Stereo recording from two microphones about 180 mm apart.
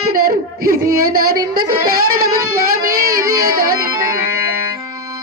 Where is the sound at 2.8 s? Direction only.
55° right (ahead or behind).